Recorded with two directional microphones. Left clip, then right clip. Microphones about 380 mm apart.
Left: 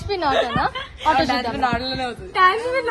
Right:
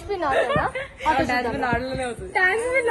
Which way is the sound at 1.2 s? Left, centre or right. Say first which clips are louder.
Left 3 dB; centre.